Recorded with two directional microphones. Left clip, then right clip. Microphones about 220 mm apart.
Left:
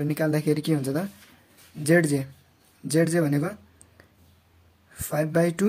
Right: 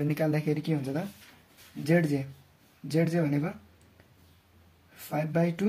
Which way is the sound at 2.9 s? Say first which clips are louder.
Left 5 dB; 30° left (ahead or behind).